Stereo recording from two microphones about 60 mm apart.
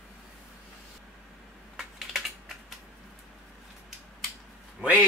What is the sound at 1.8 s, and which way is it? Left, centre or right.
Typing, centre.